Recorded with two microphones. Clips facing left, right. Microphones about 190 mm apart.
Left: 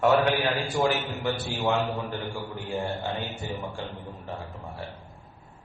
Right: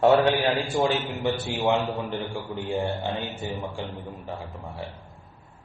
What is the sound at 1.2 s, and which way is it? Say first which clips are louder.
A man's voice: right 3 dB; 20° right (ahead or behind).